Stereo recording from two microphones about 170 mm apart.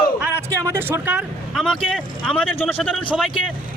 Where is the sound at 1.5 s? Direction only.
5° left (ahead or behind).